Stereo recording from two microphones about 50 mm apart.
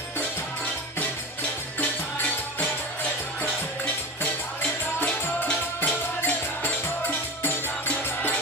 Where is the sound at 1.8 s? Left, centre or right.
Left.